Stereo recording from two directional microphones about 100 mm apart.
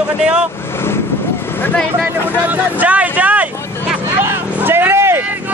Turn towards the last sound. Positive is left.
turn(degrees=-25)  # may be behind; listen again after turning